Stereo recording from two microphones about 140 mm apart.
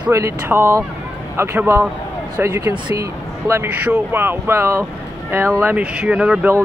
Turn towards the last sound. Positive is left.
turn(degrees=-5)  # may be behind; listen again after turning